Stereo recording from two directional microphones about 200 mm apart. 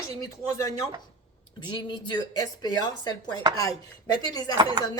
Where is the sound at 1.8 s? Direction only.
20° left (ahead or behind).